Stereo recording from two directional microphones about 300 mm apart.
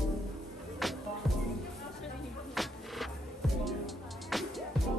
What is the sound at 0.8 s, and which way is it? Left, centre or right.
Music, centre.